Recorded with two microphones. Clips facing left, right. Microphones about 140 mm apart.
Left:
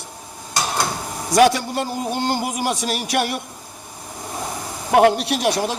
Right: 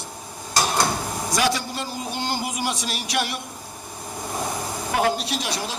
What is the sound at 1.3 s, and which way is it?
Speech, 55° left (ahead or behind).